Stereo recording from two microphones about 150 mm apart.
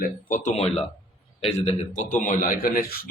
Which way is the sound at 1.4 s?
45° left (ahead or behind).